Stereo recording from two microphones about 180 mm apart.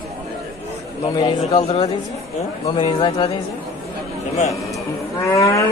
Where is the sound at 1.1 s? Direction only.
20° left (ahead or behind).